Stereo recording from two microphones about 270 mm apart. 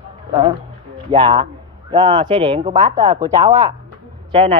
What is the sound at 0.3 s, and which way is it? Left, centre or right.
Speech, centre.